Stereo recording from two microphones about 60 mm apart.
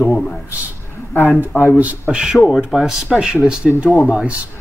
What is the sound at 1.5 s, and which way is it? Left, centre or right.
Speech, left.